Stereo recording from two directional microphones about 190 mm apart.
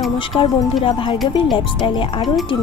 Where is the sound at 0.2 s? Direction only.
25° left (ahead or behind).